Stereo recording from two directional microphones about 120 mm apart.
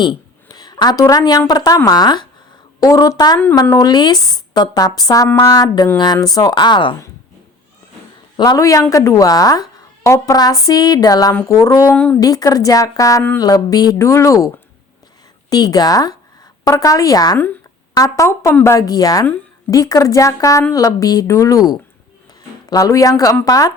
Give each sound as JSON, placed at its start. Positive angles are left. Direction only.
{"t": 0.0, "sound": "a woman's voice", "side_deg": 35}
{"t": 8.4, "sound": "a woman's voice", "side_deg": 30}